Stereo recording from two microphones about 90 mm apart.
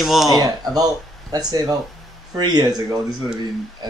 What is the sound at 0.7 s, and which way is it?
Speech, 45° right (ahead or behind).